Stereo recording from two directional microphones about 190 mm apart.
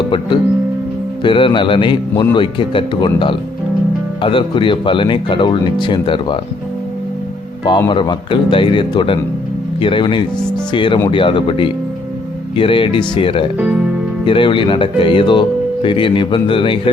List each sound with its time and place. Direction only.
1.2 s speech: 25° left (ahead or behind)
7.6 s speech: 25° left (ahead or behind)